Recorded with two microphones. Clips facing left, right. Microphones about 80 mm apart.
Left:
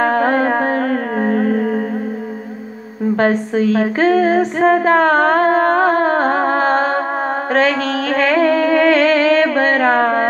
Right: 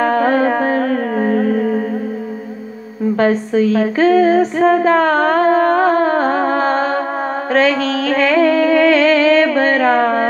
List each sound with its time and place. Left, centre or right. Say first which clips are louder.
0.0 s music: right 1 dB; left
3.2 s female singing: right 2 dB; left
7.5 s music: right 2 dB; left